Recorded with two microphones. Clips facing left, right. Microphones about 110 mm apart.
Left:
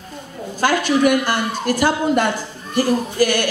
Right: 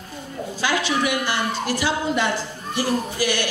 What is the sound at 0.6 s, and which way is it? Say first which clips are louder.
Speech: left 6 dB; 50° left (ahead or behind).